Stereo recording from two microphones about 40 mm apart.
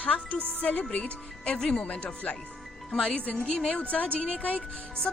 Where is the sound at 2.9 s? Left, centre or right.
Centre.